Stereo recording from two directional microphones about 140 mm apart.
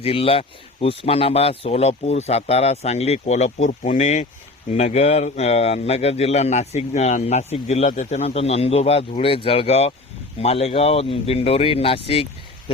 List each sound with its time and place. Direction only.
0.0 s speech: 45° left (ahead or behind)
7.9 s a man's voice: 60° left (ahead or behind)
8.2 s speech: 45° left (ahead or behind)
12.0 s a sound: 45° left (ahead or behind)